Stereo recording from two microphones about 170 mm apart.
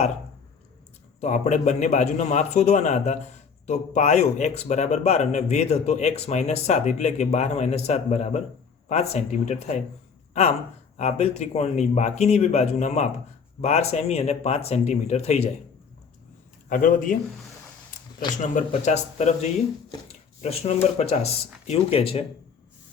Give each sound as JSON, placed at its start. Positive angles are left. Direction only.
{"t": 1.2, "sound": "a man's voice", "side_deg": 45}
{"t": 10.9, "sound": "a man's voice", "side_deg": 40}
{"t": 16.6, "sound": "a man's voice", "side_deg": 55}
{"t": 18.5, "sound": "a man's voice", "side_deg": 45}